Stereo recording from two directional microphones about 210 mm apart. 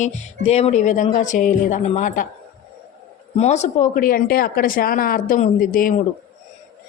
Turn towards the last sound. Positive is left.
turn(degrees=40)  # may be behind; listen again after turning